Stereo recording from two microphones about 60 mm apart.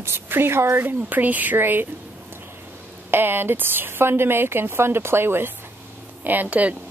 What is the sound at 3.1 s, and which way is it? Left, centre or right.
Speech, right.